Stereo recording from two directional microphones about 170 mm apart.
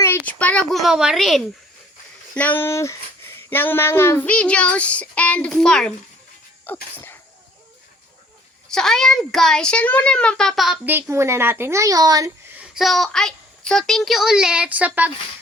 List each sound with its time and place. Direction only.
0.0 s a child's voice: 10° left (ahead or behind)
8.7 s a child's voice: 5° left (ahead or behind)
10.8 s a child's voice: 15° right (ahead or behind)
12.5 s a child's voice: centre (ahead or behind)